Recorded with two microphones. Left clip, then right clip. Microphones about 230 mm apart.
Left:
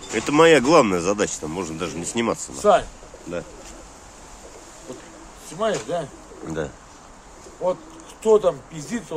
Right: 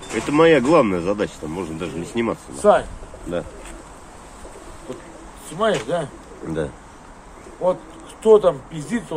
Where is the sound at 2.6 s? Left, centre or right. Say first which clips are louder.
Right 2 dB; centre.